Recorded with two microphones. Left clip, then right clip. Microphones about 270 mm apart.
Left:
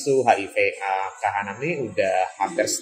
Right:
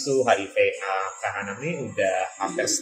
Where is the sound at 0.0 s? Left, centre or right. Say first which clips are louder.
Left 2 dB; left.